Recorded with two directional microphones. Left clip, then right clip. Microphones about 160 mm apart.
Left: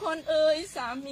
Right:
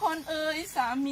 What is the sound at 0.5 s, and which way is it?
Speech, 25° left (ahead or behind).